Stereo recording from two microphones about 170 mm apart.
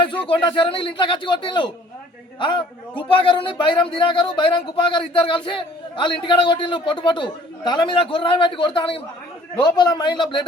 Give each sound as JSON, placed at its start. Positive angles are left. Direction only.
{"t": 0.0, "sound": "a man's voice", "side_deg": 30}